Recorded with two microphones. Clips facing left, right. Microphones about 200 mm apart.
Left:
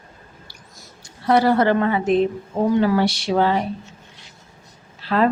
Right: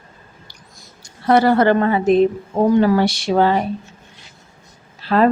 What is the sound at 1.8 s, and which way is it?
Speech, 40° right (ahead or behind).